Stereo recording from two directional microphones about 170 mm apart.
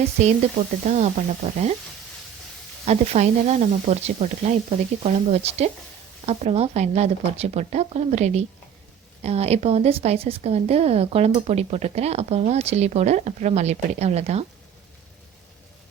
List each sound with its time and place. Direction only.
0.9 s sizzle: 45° right (ahead or behind)
2.8 s speech: 40° right (ahead or behind)